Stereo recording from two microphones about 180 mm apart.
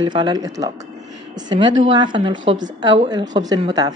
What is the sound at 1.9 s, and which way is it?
Speech, 25° right (ahead or behind).